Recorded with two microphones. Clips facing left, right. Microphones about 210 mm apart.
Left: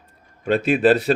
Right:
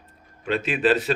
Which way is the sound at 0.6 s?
45° left (ahead or behind).